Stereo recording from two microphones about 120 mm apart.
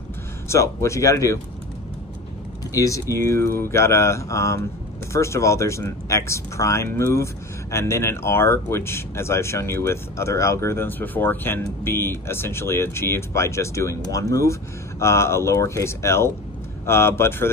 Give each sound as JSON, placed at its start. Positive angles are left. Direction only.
{"t": 0.5, "sound": "speech", "side_deg": 25}
{"t": 2.7, "sound": "speech", "side_deg": 25}